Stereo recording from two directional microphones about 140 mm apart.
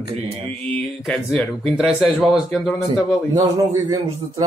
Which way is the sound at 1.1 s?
5° left (ahead or behind).